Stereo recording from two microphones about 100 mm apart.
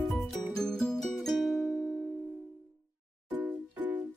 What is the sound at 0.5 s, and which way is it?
Music, 5° left (ahead or behind).